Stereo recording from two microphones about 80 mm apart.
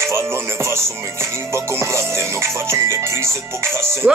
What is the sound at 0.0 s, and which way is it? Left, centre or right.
Music, right.